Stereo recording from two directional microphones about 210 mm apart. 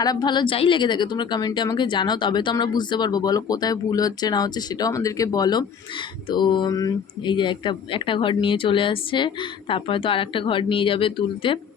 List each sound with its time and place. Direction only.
0.0 s a woman's voice: 20° left (ahead or behind)